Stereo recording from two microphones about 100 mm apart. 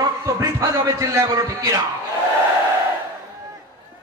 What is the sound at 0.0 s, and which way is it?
A man's voice, 35° right (ahead or behind).